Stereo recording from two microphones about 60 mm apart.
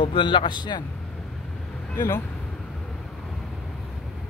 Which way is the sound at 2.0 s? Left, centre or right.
Left.